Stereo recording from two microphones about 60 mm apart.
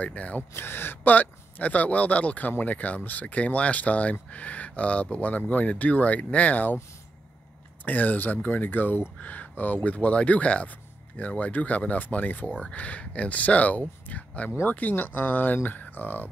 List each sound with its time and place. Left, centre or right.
0.0 s speech: left
0.6 s speech: left
7.8 s speech: left
12.5 s speech: centre